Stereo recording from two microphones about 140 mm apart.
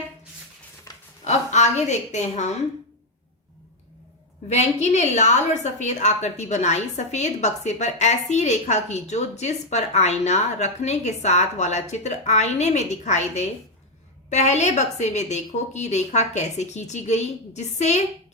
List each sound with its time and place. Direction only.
1.2 s a woman's voice: 55° left (ahead or behind)
4.4 s a woman's voice: 55° left (ahead or behind)